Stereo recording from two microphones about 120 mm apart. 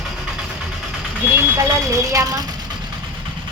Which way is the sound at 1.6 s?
25° right (ahead or behind).